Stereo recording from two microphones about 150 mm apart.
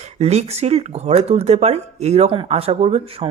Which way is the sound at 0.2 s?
45° right (ahead or behind).